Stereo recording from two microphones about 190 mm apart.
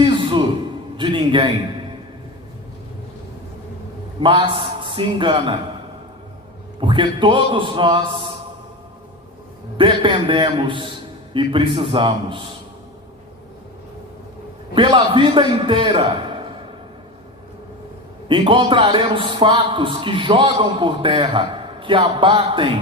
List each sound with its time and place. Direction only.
0.0 s a sound: 25° right (ahead or behind)
4.2 s a man's voice: 25° right (ahead or behind)
6.7 s a man's voice: 25° right (ahead or behind)
9.7 s a man's voice: 25° right (ahead or behind)
14.8 s a man's voice: 25° right (ahead or behind)
18.3 s a man's voice: 25° right (ahead or behind)